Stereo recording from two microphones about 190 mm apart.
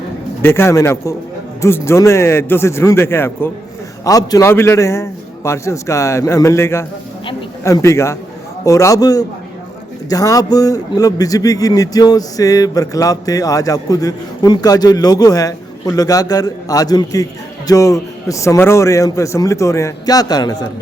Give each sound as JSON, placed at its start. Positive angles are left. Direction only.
{"t": 0.4, "sound": "a man's voice", "side_deg": 15}